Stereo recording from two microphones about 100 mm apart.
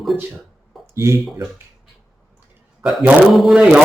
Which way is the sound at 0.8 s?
30° right (ahead or behind).